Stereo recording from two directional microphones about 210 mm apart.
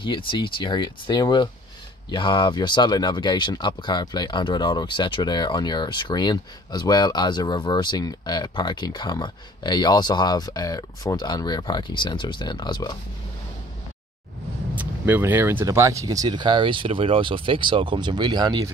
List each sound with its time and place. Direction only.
0.0 s speech: 25° left (ahead or behind)
14.8 s speech: 10° right (ahead or behind)